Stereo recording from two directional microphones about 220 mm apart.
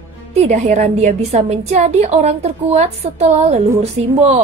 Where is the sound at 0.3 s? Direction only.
30° right (ahead or behind).